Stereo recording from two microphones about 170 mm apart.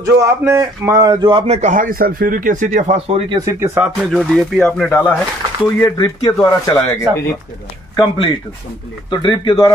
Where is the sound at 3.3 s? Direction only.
20° right (ahead or behind).